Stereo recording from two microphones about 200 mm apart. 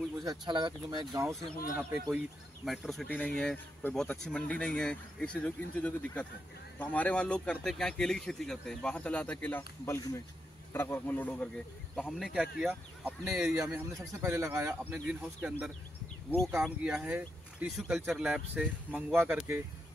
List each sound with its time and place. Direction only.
0.2 s speech: 20° right (ahead or behind)
1.8 s speech: 10° right (ahead or behind)
13.6 s a man's voice: 15° right (ahead or behind)